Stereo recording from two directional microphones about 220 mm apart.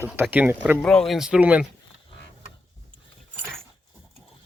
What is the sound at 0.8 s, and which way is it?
Speech, 5° left (ahead or behind).